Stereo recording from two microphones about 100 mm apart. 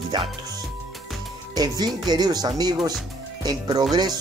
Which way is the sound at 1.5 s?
40° right (ahead or behind).